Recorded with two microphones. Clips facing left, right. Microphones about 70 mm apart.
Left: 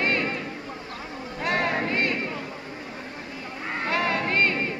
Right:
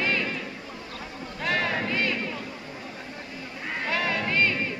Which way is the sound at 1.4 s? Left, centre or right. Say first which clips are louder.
Left 2 dB; left.